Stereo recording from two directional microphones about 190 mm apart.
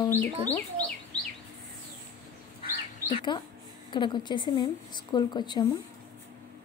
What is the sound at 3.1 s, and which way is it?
Speech, 25° left (ahead or behind).